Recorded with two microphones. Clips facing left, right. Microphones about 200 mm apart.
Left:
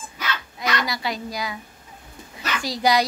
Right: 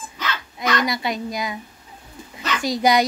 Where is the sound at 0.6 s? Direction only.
20° right (ahead or behind).